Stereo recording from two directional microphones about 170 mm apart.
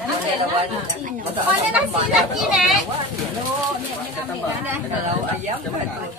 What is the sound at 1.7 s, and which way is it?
Speech, 5° right (ahead or behind).